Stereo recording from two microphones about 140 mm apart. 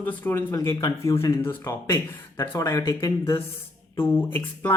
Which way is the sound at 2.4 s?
20° left (ahead or behind).